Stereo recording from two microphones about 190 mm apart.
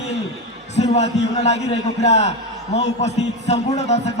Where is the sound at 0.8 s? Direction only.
35° left (ahead or behind).